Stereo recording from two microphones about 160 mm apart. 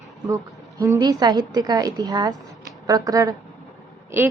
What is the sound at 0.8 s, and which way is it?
A woman's voice, 25° right (ahead or behind).